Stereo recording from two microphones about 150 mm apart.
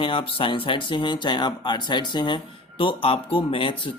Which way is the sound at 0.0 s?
35° left (ahead or behind).